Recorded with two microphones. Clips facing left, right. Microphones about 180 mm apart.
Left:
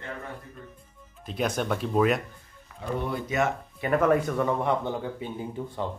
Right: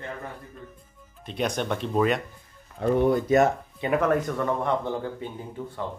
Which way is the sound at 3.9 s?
Centre (ahead or behind).